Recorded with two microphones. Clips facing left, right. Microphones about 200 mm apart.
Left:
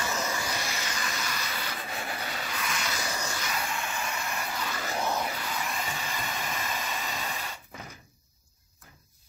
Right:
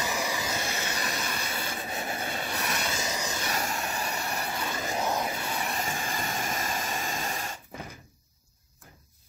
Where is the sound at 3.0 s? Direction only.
20° right (ahead or behind).